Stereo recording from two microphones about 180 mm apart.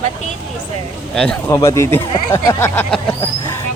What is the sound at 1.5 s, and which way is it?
Speech, 15° left (ahead or behind).